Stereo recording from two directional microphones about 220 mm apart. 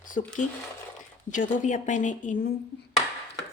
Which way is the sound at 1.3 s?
35° left (ahead or behind).